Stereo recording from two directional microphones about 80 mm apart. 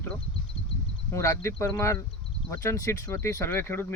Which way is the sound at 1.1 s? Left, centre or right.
Left.